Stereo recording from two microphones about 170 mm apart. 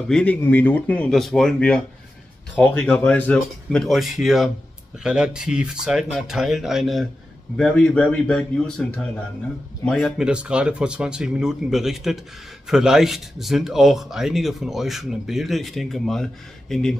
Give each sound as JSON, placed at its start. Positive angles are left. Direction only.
{"t": 0.1, "sound": "speech", "side_deg": 10}